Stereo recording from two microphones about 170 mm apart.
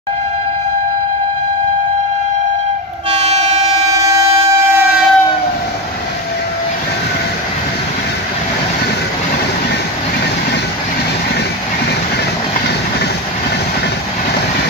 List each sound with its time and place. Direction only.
3.1 s train: 40° right (ahead or behind)
3.9 s train: 20° right (ahead or behind)